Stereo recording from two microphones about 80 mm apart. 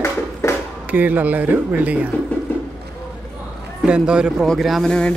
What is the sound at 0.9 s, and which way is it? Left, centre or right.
Speech, right.